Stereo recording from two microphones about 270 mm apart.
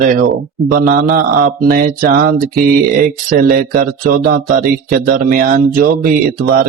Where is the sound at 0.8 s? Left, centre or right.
Right.